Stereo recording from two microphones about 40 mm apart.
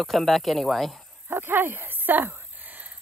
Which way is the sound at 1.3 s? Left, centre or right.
Right.